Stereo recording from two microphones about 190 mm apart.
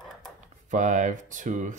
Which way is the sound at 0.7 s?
40° right (ahead or behind).